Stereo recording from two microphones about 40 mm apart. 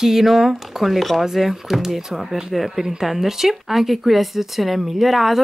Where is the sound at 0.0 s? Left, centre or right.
Centre.